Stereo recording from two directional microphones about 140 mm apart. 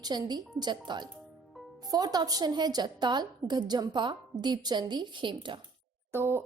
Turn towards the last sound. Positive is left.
turn(degrees=-15)  # may be behind; listen again after turning